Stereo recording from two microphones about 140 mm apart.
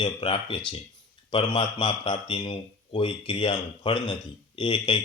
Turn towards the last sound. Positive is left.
turn(degrees=35)  # may be behind; listen again after turning